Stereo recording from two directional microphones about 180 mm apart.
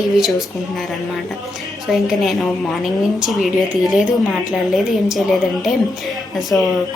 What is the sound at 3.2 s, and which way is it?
A woman's voice, centre (ahead or behind).